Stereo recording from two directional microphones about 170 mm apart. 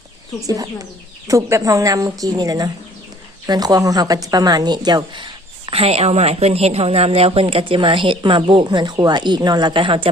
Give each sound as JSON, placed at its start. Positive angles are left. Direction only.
{"t": 0.4, "sound": "a woman's voice", "side_deg": -20}